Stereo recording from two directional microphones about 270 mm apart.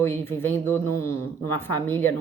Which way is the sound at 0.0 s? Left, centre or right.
Centre.